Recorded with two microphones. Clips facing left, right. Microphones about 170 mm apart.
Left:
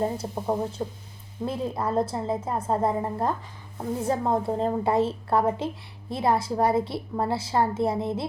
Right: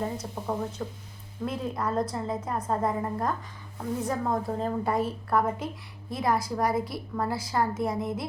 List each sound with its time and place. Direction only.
0.0 s a woman's voice: 30° left (ahead or behind)